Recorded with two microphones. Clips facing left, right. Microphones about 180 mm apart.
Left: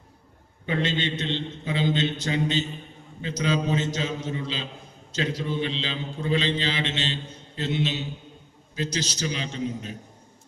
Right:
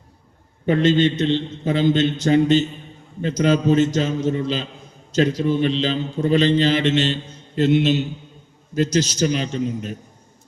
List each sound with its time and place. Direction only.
0.6 s a man's voice: 45° right (ahead or behind)